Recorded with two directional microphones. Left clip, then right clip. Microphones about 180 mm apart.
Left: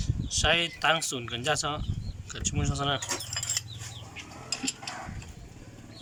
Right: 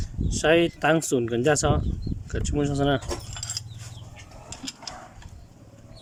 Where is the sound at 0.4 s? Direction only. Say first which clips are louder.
Right 5 dB; 55° right (ahead or behind).